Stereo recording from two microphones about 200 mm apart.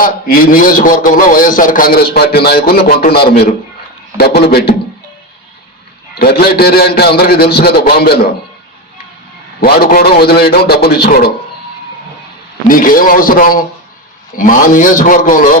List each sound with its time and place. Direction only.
0.0 s a man's voice: 45° left (ahead or behind)
6.1 s a man's voice: 50° left (ahead or behind)
9.6 s a man's voice: 50° left (ahead or behind)
12.6 s a man's voice: 45° left (ahead or behind)